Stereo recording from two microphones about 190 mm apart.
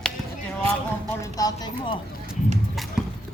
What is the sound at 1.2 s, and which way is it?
Speech, 20° left (ahead or behind).